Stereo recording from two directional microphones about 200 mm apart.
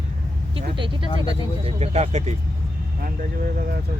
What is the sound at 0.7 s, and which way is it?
Speech, 25° right (ahead or behind).